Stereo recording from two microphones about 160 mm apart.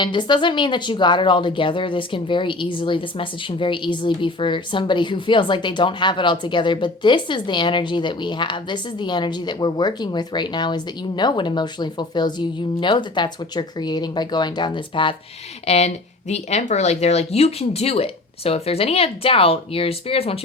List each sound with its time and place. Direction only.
0.0 s speech: 30° left (ahead or behind)
15.6 s speech: 40° left (ahead or behind)